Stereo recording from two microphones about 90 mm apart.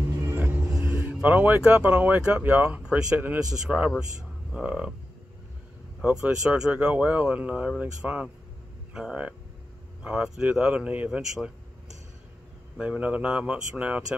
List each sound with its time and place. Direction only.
0.3 s a sound: 25° right (ahead or behind)
1.2 s speech: 20° right (ahead or behind)
6.0 s speech: 10° right (ahead or behind)
12.7 s speech: 15° right (ahead or behind)